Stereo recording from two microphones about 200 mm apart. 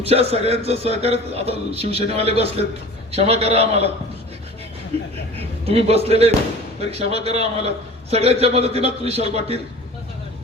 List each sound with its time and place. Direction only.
0.0 s a man's voice: 30° right (ahead or behind)
5.6 s a man's voice: 30° right (ahead or behind)